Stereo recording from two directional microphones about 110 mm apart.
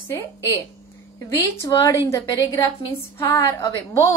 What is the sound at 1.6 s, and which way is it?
A woman's voice, 35° left (ahead or behind).